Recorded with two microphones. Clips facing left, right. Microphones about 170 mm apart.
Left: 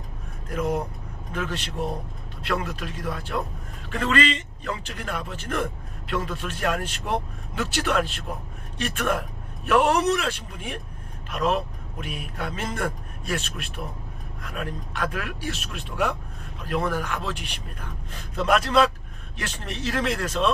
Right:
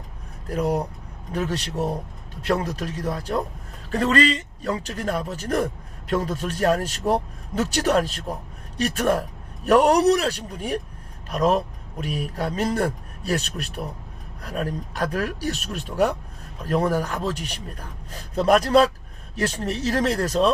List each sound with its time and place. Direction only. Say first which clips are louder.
0.4 s a man's voice: right 3 dB; 35° right (ahead or behind)